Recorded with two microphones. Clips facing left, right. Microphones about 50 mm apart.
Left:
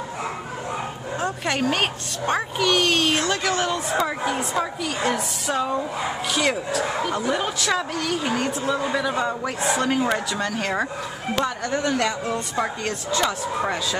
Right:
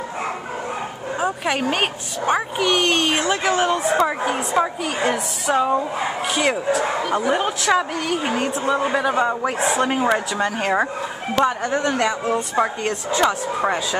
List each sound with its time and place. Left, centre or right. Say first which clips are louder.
1.2 s a woman's voice: right 2 dB; centre
6.3 s speech: right 3 dB; centre
7.2 s a woman's voice: right 4 dB; right